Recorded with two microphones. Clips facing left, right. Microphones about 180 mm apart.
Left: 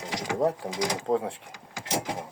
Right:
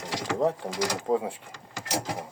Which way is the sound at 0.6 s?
Centre (ahead or behind).